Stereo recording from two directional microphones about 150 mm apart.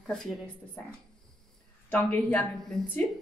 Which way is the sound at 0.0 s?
5° left (ahead or behind).